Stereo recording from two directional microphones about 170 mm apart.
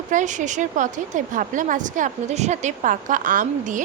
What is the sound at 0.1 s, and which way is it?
A woman's voice, 45° right (ahead or behind).